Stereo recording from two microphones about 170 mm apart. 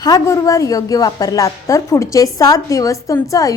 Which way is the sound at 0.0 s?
20° left (ahead or behind).